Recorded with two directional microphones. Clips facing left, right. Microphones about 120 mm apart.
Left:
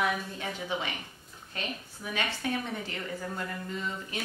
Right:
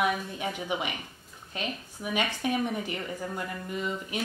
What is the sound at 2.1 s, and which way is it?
A woman's voice, 15° right (ahead or behind).